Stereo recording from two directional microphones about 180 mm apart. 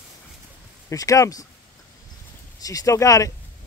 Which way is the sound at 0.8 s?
20° left (ahead or behind).